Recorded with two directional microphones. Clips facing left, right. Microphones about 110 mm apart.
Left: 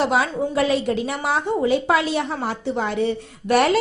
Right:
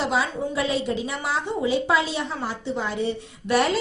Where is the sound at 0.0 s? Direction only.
60° left (ahead or behind).